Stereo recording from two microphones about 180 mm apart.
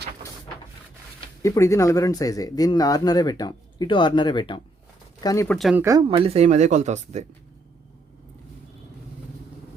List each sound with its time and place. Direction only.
1.4 s speech: 15° left (ahead or behind)
5.5 s speech: centre (ahead or behind)
5.7 s speech: 15° right (ahead or behind)
6.1 s speech: 30° right (ahead or behind)